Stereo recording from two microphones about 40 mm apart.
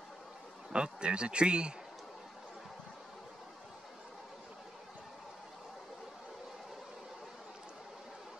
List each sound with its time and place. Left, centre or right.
0.7 s speech: right